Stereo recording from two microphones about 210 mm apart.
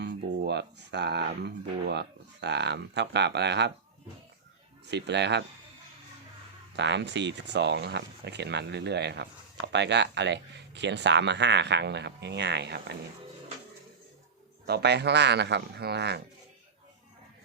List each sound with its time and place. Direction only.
0.0 s speech: 55° right (ahead or behind)
4.9 s speech: 55° right (ahead or behind)
6.7 s speech: 55° right (ahead or behind)
14.7 s speech: 50° right (ahead or behind)